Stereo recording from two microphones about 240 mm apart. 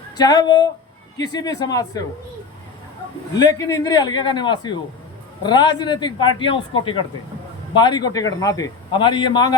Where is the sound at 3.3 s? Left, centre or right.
Centre.